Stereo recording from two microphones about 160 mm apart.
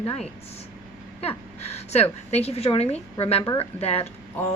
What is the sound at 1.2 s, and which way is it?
A woman's voice, 40° left (ahead or behind).